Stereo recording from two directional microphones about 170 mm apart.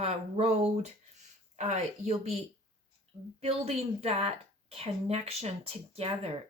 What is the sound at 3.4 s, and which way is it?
Speech, 35° right (ahead or behind).